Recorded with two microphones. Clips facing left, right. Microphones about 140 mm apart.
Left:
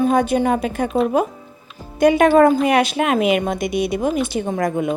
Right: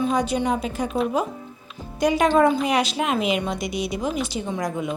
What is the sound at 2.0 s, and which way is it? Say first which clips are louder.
Speech: left 6 dB; 55° left (ahead or behind).